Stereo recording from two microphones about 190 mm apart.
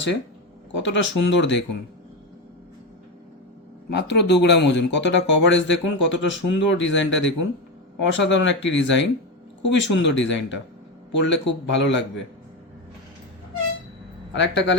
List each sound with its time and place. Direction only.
0.7 s speech: 75° left (ahead or behind)
3.8 s speech: 65° left (ahead or behind)
14.3 s speech: 70° left (ahead or behind)